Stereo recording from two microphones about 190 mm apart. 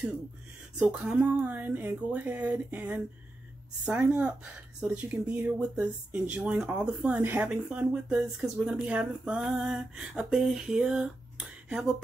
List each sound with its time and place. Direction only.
0.7 s speech: 5° right (ahead or behind)